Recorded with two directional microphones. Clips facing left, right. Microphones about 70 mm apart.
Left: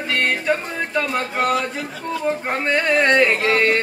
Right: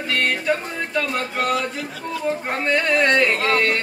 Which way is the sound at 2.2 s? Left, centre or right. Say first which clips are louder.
Left 1 dB; left.